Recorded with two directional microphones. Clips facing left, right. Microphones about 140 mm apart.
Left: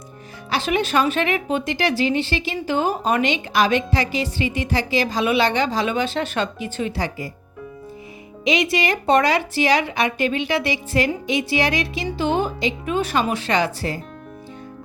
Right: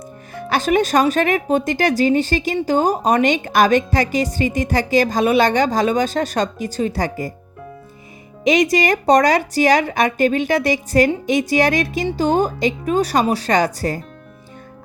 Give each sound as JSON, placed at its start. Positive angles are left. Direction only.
{"t": 0.3, "sound": "a woman's voice", "side_deg": -50}
{"t": 8.4, "sound": "a woman's voice", "side_deg": -45}